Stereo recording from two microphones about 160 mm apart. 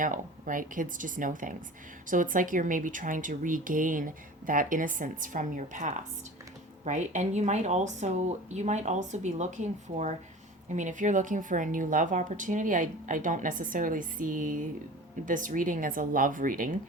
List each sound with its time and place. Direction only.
0.0 s speech: 55° right (ahead or behind)
10.7 s speech: 50° right (ahead or behind)